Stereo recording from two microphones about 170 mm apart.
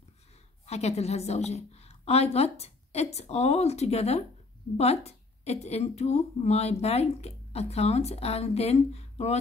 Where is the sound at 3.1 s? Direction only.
40° left (ahead or behind).